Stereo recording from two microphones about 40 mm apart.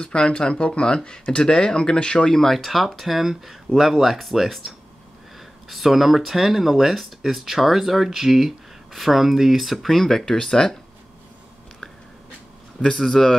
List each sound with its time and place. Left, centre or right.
0.0 s speech: left
12.9 s speech: centre